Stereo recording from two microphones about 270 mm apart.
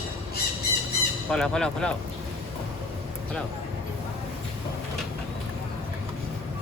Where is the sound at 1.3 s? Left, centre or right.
Centre.